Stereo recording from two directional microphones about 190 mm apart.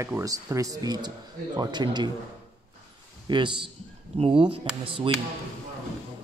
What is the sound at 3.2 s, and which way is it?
A man's voice, 25° right (ahead or behind).